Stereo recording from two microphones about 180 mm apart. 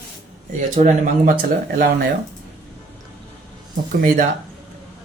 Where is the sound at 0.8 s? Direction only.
45° right (ahead or behind).